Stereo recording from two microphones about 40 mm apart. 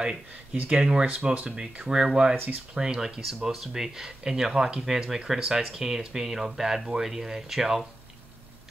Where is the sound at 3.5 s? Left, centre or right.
Centre.